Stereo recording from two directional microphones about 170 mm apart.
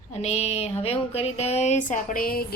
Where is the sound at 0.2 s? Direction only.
40° left (ahead or behind).